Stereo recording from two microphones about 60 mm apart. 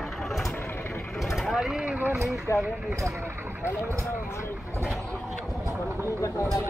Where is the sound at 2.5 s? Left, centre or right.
Left.